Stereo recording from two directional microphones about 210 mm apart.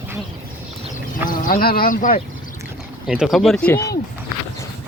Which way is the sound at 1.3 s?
40° left (ahead or behind).